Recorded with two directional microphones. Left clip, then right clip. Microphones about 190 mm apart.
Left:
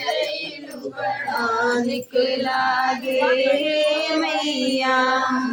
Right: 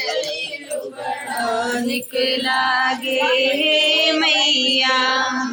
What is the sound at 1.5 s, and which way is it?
Music, 25° left (ahead or behind).